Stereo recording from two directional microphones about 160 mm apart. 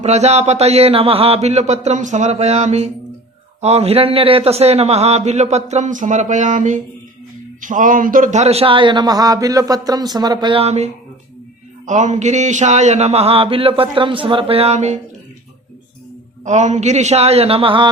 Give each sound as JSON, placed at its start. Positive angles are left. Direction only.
{"t": 0.0, "sound": "a man's voice", "side_deg": -45}
{"t": 11.9, "sound": "a man's voice", "side_deg": -50}
{"t": 16.4, "sound": "a man's voice", "side_deg": -50}